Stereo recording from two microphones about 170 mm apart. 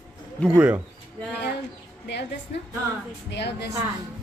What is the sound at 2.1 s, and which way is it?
Speech, 90° left.